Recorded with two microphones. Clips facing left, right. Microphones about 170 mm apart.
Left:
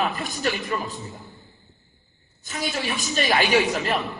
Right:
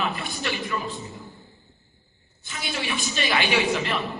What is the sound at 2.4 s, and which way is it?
A man's voice, 40° left (ahead or behind).